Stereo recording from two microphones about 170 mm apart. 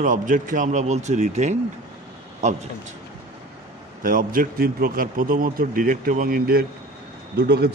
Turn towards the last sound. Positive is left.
turn(degrees=-75)  # may be behind; listen again after turning